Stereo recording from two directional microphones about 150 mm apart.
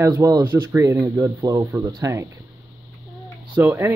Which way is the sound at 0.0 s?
20° right (ahead or behind).